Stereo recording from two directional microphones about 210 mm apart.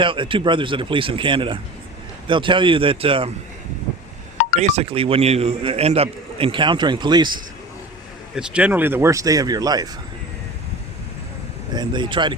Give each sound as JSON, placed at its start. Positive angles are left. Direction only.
{"t": 0.0, "sound": "a man's voice", "side_deg": -25}
{"t": 4.5, "sound": "a man's voice", "side_deg": -30}
{"t": 8.4, "sound": "speech", "side_deg": -5}
{"t": 11.7, "sound": "a man's voice", "side_deg": -20}